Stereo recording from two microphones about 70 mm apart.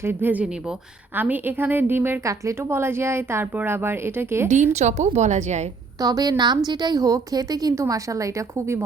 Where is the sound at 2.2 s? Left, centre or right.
Right.